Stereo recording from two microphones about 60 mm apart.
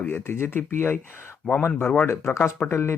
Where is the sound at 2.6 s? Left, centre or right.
Left.